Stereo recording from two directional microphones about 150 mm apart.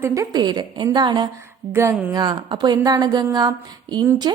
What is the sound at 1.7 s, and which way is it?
A woman's voice, 20° right (ahead or behind).